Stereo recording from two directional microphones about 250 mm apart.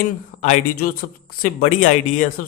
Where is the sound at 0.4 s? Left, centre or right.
Left.